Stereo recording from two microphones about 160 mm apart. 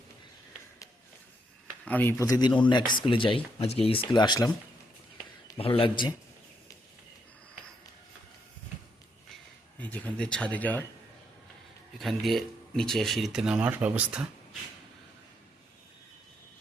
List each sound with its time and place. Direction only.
1.8 s speech: 10° left (ahead or behind)
5.5 s speech: 35° left (ahead or behind)
9.7 s speech: 10° left (ahead or behind)
11.9 s speech: centre (ahead or behind)